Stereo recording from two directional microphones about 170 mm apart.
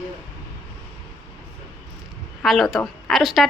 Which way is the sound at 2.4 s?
Centre (ahead or behind).